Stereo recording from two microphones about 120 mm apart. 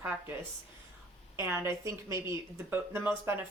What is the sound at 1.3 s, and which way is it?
Speech, 20° right (ahead or behind).